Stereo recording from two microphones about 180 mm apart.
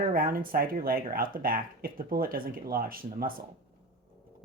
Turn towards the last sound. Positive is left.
turn(degrees=-50)  # may be behind; listen again after turning